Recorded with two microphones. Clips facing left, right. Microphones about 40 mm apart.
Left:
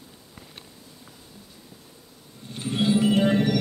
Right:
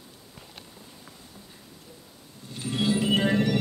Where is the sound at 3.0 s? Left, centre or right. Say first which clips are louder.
Left 3 dB; right.